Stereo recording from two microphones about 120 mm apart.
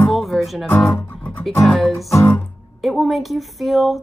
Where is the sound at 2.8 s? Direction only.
Centre (ahead or behind).